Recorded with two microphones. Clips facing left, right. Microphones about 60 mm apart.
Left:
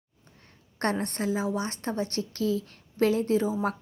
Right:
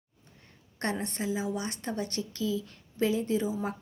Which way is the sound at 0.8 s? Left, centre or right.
Left.